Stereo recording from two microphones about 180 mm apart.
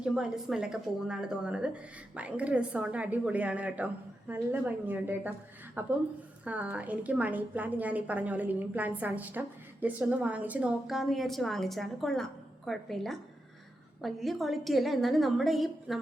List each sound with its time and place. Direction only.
0.0 s a woman's voice: 5° right (ahead or behind)